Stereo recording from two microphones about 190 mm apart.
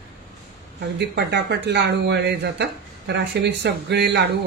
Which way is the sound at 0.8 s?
65° right (ahead or behind).